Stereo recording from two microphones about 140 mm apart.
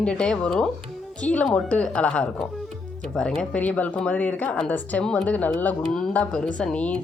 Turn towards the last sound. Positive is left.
turn(degrees=10)  # may be behind; listen again after turning